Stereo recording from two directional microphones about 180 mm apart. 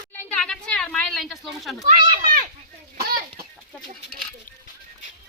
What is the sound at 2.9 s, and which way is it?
Chicken, 55° right (ahead or behind).